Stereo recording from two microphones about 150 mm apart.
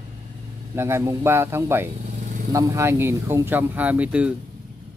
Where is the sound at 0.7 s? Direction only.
15° right (ahead or behind).